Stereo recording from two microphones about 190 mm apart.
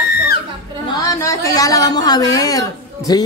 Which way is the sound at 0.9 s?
20° left (ahead or behind).